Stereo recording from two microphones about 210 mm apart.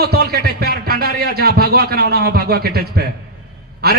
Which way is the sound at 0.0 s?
50° right (ahead or behind).